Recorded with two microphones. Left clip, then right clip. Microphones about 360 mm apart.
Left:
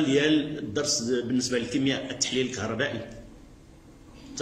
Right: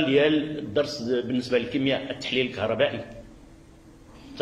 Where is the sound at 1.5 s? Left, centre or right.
Centre.